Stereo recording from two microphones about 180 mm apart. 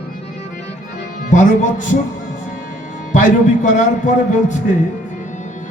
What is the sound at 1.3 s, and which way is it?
Speech, 45° left (ahead or behind).